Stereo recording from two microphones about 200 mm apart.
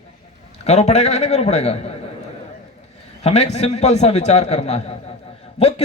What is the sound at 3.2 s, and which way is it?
A man's voice, 35° left (ahead or behind).